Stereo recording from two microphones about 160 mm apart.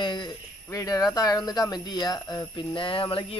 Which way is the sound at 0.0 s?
30° left (ahead or behind).